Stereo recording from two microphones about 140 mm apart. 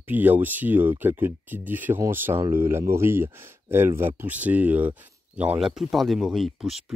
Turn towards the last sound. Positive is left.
turn(degrees=-5)  # may be behind; listen again after turning